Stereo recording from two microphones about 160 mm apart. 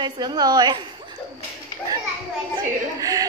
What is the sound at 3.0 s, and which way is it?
Speech, 20° right (ahead or behind).